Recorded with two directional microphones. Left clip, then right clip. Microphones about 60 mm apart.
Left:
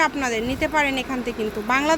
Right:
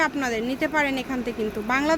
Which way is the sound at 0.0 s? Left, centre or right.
Centre.